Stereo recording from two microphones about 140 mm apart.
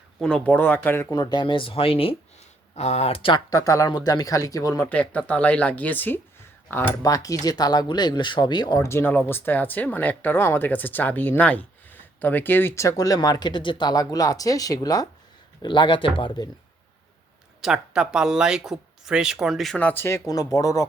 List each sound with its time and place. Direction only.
0.2 s speech: 5° left (ahead or behind)
1.1 s speech: 30° left (ahead or behind)
3.5 s speech: 25° left (ahead or behind)
4.9 s speech: 10° left (ahead or behind)
7.0 s speech: 25° left (ahead or behind)
8.9 s speech: 15° left (ahead or behind); by 16.5 s 35° left (ahead or behind)
17.6 s speech: 5° right (ahead or behind); by 20.8 s 25° left (ahead or behind)